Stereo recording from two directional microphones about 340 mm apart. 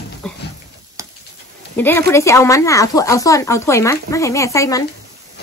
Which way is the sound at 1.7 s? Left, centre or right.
Centre.